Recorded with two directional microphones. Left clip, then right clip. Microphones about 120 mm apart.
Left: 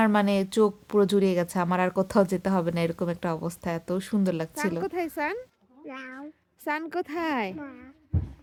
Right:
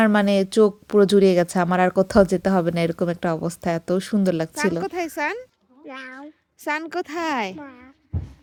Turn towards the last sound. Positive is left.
turn(degrees=10)  # may be behind; listen again after turning